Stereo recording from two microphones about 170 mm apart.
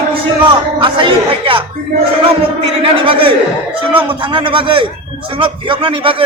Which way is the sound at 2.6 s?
30° right (ahead or behind).